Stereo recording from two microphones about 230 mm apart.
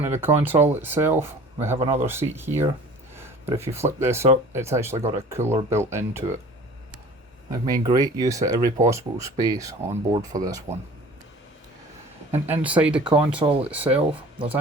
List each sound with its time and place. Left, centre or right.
0.0 s speech: centre
7.5 s speech: centre
12.3 s speech: centre